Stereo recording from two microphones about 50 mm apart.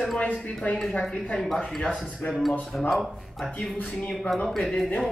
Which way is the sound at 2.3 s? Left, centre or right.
Centre.